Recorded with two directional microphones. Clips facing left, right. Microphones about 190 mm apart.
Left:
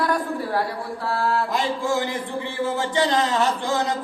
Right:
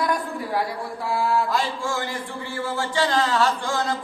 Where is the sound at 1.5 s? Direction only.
20° left (ahead or behind).